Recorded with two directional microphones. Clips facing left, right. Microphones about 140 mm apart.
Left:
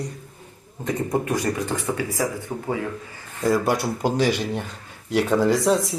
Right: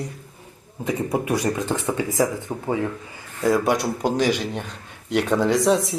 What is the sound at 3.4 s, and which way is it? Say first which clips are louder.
Speech: right 1 dB; centre (ahead or behind).